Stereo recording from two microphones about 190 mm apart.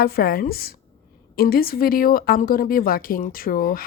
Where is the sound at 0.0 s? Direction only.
50° left (ahead or behind).